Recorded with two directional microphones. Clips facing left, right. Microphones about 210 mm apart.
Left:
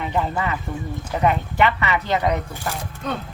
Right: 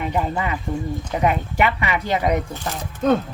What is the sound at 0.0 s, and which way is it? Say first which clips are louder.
Speech: right 1 dB; 15° right (ahead or behind).